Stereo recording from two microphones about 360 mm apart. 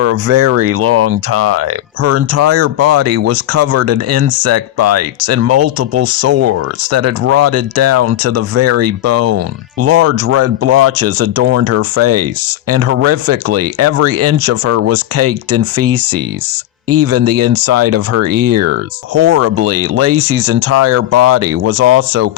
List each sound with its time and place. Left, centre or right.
0.0 s speech: right
18.3 s speech: right
19.1 s speech: right
20.2 s speech: right
20.5 s speech: right